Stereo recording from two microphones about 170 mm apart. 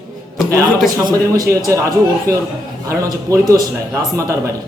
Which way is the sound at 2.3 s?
60° right (ahead or behind).